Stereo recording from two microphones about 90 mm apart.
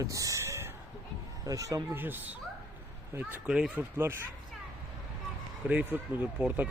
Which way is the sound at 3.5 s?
10° right (ahead or behind).